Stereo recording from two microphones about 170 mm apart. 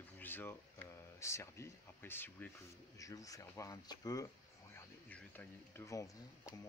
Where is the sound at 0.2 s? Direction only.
10° left (ahead or behind).